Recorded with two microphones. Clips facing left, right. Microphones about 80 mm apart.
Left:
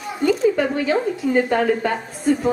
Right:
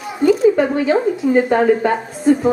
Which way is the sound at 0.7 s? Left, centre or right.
Centre.